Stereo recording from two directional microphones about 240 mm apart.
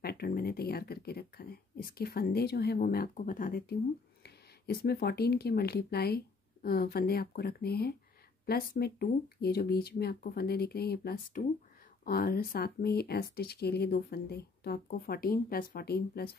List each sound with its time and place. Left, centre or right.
0.0 s speech: left